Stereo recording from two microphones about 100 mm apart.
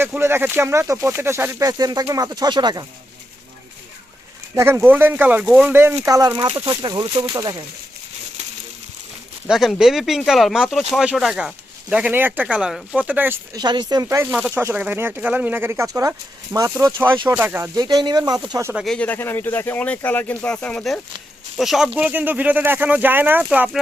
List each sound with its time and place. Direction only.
0.0 s speech: 25° right (ahead or behind); by 2.8 s 45° right (ahead or behind)
4.5 s speech: 25° right (ahead or behind); by 5.7 s 10° right (ahead or behind)
5.7 s speech: 20° right (ahead or behind)
6.1 s speech: 35° right (ahead or behind)
6.7 s speech: 50° right (ahead or behind)
7.3 s speech: 40° right (ahead or behind)
9.5 s speech: 5° right (ahead or behind); by 13.4 s 20° right (ahead or behind)
13.5 s speech: 45° right (ahead or behind)
14.1 s speech: 25° right (ahead or behind)
17.7 s speech: 40° right (ahead or behind)
18.9 s speech: 15° left (ahead or behind); by 21.9 s centre (ahead or behind)
21.9 s speech: 15° right (ahead or behind)